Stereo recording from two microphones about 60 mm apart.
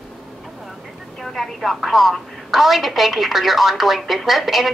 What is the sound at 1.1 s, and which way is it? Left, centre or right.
A woman's voice, centre.